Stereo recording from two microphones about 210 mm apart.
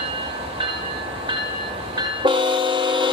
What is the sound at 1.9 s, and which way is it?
Train, 25° right (ahead or behind).